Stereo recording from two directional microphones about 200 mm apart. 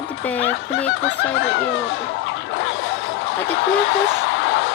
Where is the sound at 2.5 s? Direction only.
75° left (ahead or behind).